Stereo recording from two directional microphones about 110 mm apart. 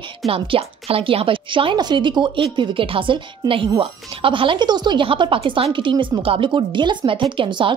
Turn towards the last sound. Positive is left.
turn(degrees=-50)  # may be behind; listen again after turning